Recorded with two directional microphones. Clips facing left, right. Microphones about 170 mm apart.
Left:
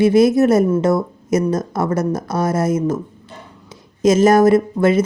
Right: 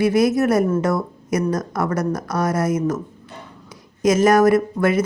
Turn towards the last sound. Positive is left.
turn(degrees=25)  # may be behind; listen again after turning